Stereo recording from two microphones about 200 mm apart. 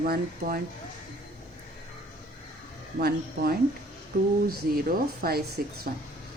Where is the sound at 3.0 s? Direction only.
50° right (ahead or behind).